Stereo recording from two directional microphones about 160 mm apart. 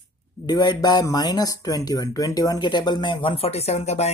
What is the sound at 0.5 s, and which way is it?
Speech, 25° left (ahead or behind).